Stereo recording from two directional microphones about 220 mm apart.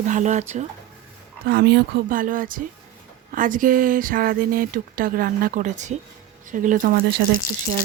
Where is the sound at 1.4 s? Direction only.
45° right (ahead or behind).